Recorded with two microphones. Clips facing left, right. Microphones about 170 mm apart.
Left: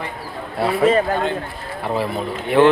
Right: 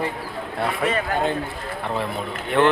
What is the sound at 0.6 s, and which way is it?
Speech, 30° left (ahead or behind).